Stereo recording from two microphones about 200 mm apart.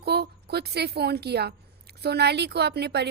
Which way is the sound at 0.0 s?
55° right (ahead or behind).